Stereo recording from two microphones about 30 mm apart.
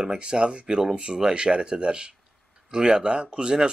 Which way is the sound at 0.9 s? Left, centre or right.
Right.